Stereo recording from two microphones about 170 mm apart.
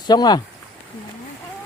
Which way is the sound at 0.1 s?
25° left (ahead or behind).